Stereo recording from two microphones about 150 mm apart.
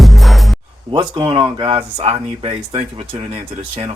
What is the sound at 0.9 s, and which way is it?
Speech, 30° right (ahead or behind).